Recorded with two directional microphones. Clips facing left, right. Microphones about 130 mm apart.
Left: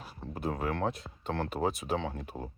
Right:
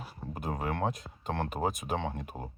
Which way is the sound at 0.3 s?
40° right (ahead or behind).